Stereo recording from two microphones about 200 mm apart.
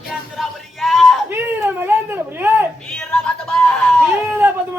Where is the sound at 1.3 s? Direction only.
10° right (ahead or behind).